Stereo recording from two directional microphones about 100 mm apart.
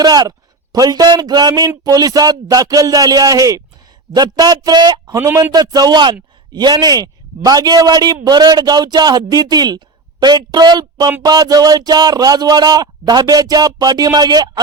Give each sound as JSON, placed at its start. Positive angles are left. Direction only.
{"t": 0.0, "sound": "a man's voice", "side_deg": -40}
{"t": 5.1, "sound": "a man's voice", "side_deg": -25}